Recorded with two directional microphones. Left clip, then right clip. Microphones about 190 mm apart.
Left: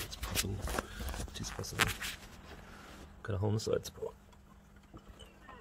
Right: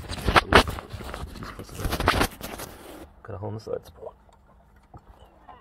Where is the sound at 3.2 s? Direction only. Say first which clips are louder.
Right 1 dB; 80° left.